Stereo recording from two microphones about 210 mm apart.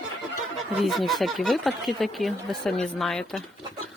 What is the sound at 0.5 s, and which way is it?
Speech, centre (ahead or behind).